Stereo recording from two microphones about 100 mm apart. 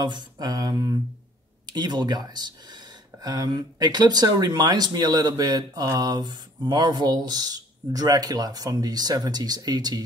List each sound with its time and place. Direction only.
0.0 s speech: 50° right (ahead or behind)